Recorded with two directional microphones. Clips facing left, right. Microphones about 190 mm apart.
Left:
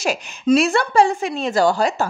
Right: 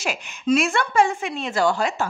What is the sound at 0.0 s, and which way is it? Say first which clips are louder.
A woman's voice: left 5 dB; 40° left (ahead or behind).